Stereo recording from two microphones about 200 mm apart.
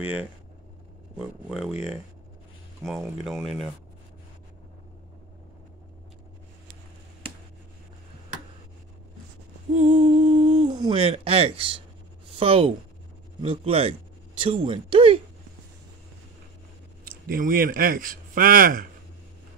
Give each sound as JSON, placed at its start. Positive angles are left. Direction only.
{"t": 0.0, "sound": "speech", "side_deg": -10}
{"t": 3.3, "sound": "speech", "side_deg": 0}
{"t": 9.8, "sound": "humming", "side_deg": -35}
{"t": 10.7, "sound": "speech", "side_deg": -25}
{"t": 17.0, "sound": "speech", "side_deg": -45}